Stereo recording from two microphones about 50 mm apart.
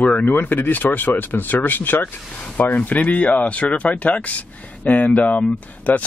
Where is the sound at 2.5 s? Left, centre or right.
Left.